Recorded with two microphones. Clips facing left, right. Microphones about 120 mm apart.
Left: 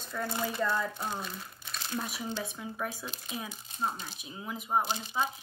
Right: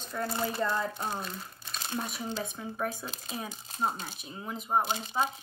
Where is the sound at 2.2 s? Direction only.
30° right (ahead or behind).